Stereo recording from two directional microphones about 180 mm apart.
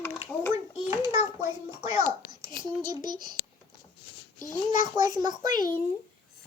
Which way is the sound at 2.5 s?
45° left (ahead or behind).